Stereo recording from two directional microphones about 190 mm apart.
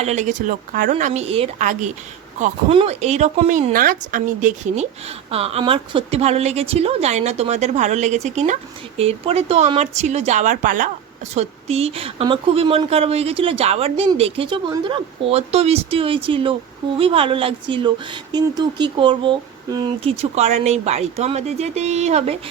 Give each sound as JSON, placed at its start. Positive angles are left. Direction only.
{"t": 0.0, "sound": "speech", "side_deg": -35}
{"t": 11.3, "sound": "speech", "side_deg": -35}
{"t": 20.3, "sound": "speech", "side_deg": -35}